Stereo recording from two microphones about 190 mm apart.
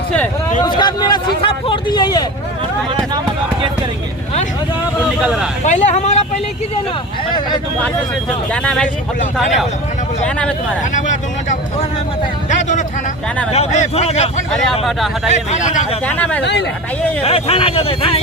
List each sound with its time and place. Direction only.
0.6 s speech: 20° left (ahead or behind)
1.4 s a sound: 30° left (ahead or behind)
5.2 s a sound: 5° right (ahead or behind)
5.6 s a sound: 40° left (ahead or behind)
8.5 s speech: 5° left (ahead or behind)
10.2 s speech: 5° left (ahead or behind)
10.9 s speech: 40° left (ahead or behind)
14.8 s speech: centre (ahead or behind)
15.3 s speech: 40° left (ahead or behind)
16.0 s speech: 10° left (ahead or behind)
16.4 s speech: 65° left (ahead or behind)
17.2 s speech: 30° left (ahead or behind)